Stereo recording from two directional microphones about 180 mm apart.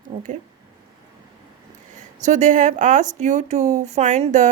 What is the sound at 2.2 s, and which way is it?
A woman's voice, 45° right (ahead or behind).